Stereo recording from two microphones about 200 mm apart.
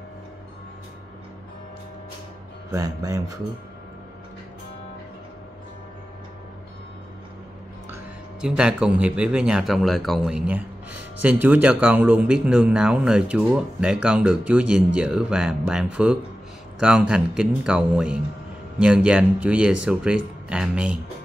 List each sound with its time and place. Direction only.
2.7 s speech: 15° right (ahead or behind)
8.4 s speech: 5° right (ahead or behind)